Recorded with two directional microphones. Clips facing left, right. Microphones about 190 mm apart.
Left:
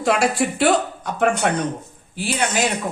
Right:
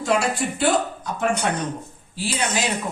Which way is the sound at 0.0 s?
70° left (ahead or behind).